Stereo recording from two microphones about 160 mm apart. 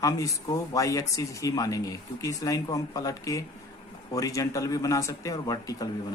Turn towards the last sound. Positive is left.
turn(degrees=20)  # may be behind; listen again after turning